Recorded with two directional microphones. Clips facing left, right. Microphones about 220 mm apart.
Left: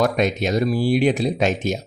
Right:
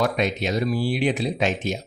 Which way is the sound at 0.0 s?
45° left (ahead or behind).